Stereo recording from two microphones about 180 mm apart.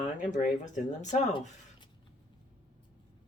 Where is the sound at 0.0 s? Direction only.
40° left (ahead or behind).